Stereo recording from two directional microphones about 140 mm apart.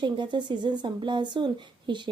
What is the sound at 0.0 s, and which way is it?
Speech, 35° right (ahead or behind).